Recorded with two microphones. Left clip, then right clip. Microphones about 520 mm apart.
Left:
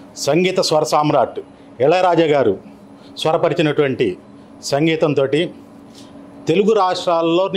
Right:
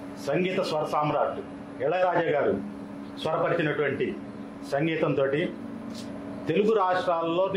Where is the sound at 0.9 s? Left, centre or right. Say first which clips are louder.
Left 10 dB; left.